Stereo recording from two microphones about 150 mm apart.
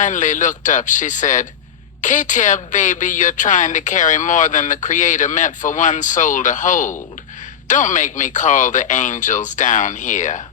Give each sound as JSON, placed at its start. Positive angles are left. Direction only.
{"t": 0.0, "sound": "a woman's voice", "side_deg": 55}